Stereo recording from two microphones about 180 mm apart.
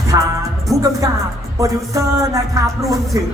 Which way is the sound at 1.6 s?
15° right (ahead or behind).